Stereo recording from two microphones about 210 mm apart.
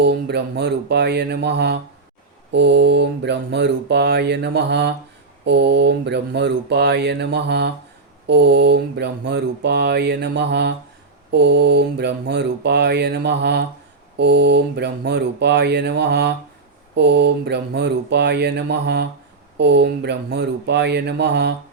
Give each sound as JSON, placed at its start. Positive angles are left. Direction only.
{"t": 0.0, "sound": "mantra", "side_deg": -50}